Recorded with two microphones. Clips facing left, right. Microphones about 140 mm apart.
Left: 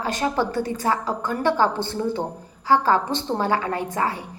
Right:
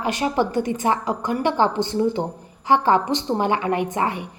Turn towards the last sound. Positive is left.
turn(degrees=-20)  # may be behind; listen again after turning